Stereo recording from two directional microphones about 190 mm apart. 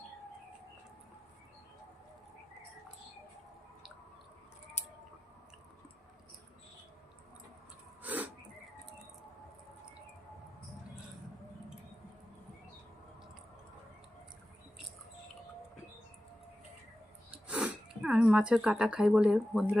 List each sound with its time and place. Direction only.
4.8 s squish: 35° left (ahead or behind)
8.0 s a sound: 10° right (ahead or behind)
17.5 s speech: 5° right (ahead or behind)